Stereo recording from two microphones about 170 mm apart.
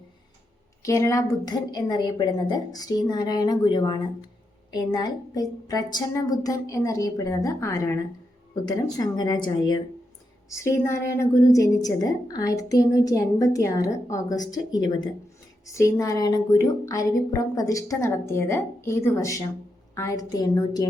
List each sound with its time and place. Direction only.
0.8 s a woman's voice: 20° left (ahead or behind)